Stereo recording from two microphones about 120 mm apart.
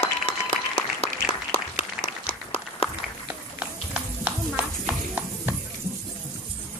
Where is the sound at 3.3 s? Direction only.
10° right (ahead or behind).